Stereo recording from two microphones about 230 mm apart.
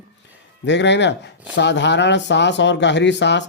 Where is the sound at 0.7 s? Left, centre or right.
Left.